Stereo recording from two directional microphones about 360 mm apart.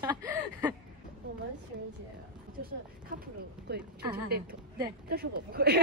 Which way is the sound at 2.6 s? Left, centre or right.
Right.